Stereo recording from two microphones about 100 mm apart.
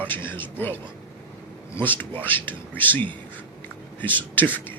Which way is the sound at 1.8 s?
15° left (ahead or behind).